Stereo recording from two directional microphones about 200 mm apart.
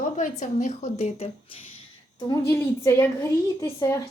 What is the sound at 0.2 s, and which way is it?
A woman's voice, 35° left (ahead or behind).